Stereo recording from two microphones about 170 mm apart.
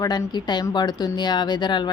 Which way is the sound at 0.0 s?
25° left (ahead or behind).